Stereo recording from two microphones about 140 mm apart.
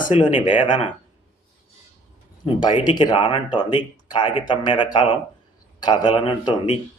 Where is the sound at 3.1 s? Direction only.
40° left (ahead or behind).